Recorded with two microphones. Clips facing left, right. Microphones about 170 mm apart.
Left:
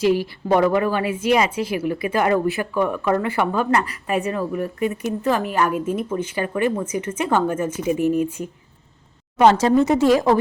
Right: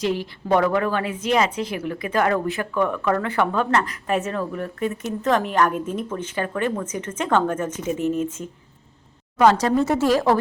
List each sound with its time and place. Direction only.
0.0 s a woman's voice: 5° left (ahead or behind)
9.4 s speech: 25° left (ahead or behind)